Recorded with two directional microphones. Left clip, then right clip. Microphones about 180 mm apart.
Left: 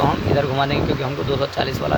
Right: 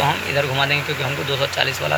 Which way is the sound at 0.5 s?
25° left (ahead or behind).